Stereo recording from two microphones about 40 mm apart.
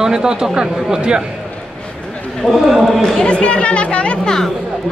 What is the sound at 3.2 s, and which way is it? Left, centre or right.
Speech, left.